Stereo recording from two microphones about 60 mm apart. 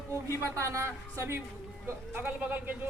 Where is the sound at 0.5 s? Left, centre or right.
Right.